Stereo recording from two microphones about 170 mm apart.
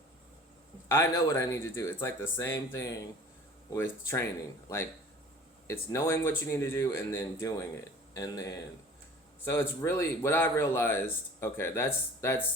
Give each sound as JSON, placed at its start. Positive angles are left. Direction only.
{"t": 0.9, "sound": "speech", "side_deg": 15}
{"t": 5.6, "sound": "speech", "side_deg": 15}